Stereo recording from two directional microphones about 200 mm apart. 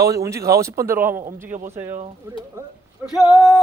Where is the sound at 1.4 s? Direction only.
35° right (ahead or behind).